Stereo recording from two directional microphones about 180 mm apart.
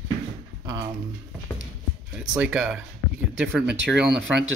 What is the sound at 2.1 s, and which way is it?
Speech, 5° right (ahead or behind).